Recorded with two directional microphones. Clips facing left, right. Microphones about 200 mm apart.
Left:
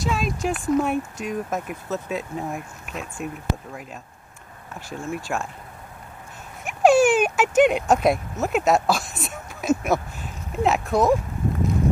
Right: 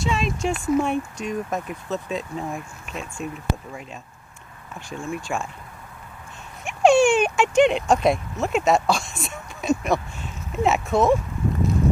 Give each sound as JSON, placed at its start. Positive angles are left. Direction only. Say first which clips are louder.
{"t": 0.0, "sound": "speech", "louder": "even", "side_deg": 0}
{"t": 4.7, "sound": "speech", "louder": "even", "side_deg": 5}
{"t": 6.6, "sound": "speech", "louder": "even", "side_deg": 5}